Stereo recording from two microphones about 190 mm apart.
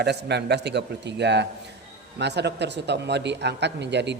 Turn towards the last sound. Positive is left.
turn(degrees=-65)  # may be behind; listen again after turning